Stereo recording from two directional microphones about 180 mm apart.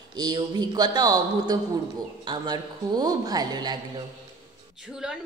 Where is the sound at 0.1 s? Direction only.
20° right (ahead or behind).